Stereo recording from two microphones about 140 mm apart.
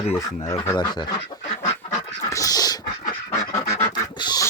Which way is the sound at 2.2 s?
25° left (ahead or behind).